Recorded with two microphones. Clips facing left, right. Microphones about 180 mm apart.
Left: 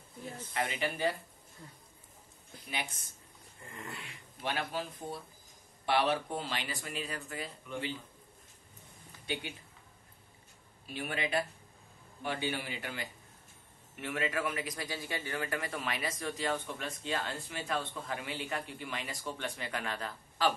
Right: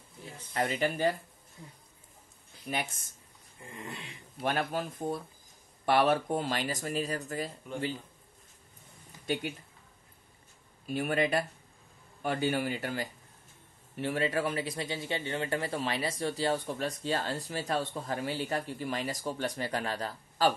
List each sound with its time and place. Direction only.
0.5 s speech: 45° right (ahead or behind)
2.6 s speech: 45° right (ahead or behind)
3.6 s a sound: 20° right (ahead or behind)
4.4 s speech: 50° right (ahead or behind)
9.2 s speech: 45° right (ahead or behind)
10.9 s a man's voice: 45° right (ahead or behind)